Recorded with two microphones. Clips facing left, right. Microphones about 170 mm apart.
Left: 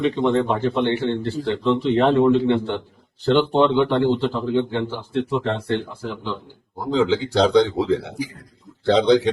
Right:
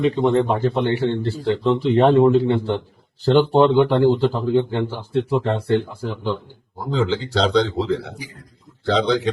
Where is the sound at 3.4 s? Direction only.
40° right (ahead or behind).